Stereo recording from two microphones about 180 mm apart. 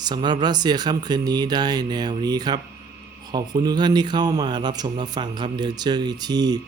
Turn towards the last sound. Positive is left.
turn(degrees=-20)  # may be behind; listen again after turning